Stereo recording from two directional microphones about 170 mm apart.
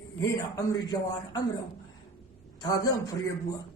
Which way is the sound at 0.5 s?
25° left (ahead or behind).